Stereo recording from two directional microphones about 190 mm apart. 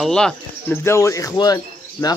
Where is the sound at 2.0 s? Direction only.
20° left (ahead or behind).